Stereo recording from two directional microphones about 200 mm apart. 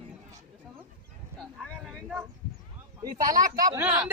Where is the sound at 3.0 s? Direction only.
20° right (ahead or behind).